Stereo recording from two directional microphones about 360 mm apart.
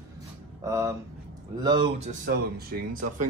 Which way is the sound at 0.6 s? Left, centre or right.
Centre.